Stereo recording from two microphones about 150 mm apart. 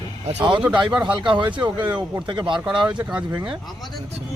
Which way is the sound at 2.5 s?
5° right (ahead or behind).